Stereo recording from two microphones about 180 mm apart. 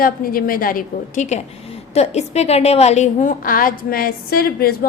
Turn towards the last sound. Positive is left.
turn(degrees=60)  # may be behind; listen again after turning